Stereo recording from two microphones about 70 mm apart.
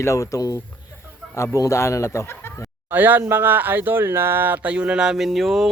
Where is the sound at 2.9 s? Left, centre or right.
Right.